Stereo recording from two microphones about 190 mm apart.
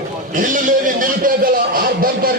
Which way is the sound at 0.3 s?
45° right (ahead or behind).